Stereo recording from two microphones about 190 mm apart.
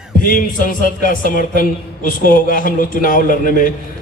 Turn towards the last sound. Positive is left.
turn(degrees=45)  # may be behind; listen again after turning